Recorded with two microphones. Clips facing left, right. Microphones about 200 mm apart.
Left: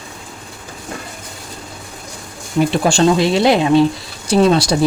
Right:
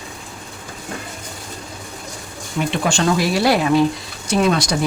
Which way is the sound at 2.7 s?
35° left (ahead or behind).